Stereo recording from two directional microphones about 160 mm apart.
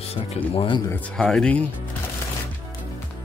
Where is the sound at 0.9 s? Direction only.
5° left (ahead or behind).